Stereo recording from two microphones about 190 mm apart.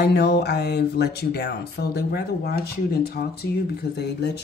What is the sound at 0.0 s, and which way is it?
Speech, 60° left (ahead or behind).